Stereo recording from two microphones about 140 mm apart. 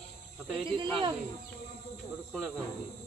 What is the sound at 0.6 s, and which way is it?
Speech, 35° right (ahead or behind).